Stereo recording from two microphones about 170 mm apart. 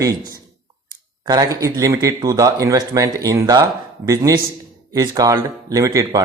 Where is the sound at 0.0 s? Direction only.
20° right (ahead or behind).